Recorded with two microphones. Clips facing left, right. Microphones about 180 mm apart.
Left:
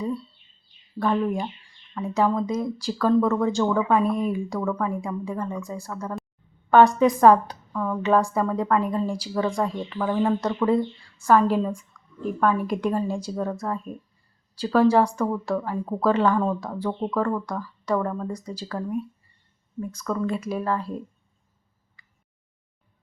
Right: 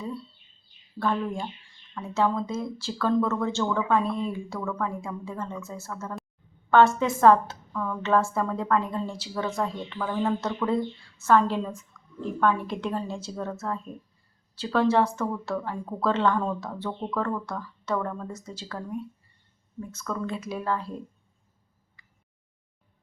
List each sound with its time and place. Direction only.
0.9 s a woman's voice: 15° left (ahead or behind)